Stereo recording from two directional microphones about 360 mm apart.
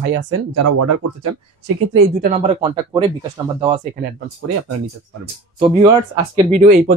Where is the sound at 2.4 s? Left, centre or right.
Centre.